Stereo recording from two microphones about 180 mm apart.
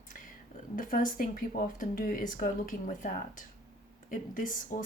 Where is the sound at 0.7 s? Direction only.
50° left (ahead or behind).